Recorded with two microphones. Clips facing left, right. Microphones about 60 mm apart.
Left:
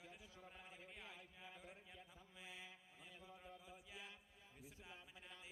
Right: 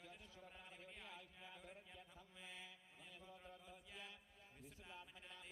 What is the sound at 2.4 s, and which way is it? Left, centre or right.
Mantra, centre.